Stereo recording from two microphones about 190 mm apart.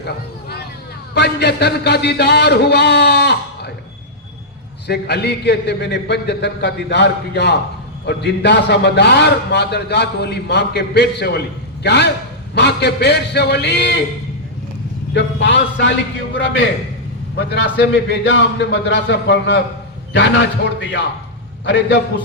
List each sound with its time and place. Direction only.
1.1 s a man's voice: 60° left (ahead or behind)
4.9 s a man's voice: 60° left (ahead or behind)
15.1 s speech: 70° left (ahead or behind)
17.3 s a man's voice: 60° left (ahead or behind)
21.6 s a man's voice: 65° left (ahead or behind)